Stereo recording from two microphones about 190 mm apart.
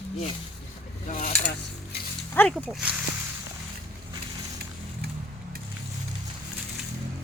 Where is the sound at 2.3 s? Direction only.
10° left (ahead or behind).